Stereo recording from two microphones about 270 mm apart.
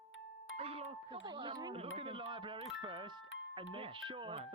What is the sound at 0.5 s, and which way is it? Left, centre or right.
Speech, right.